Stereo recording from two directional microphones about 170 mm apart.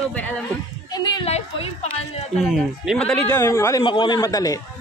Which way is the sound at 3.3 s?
20° left (ahead or behind).